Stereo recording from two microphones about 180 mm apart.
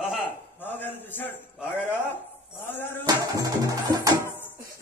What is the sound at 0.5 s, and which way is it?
Speech, 10° left (ahead or behind).